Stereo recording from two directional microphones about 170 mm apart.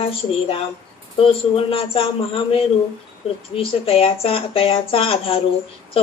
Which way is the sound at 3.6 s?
35° left (ahead or behind).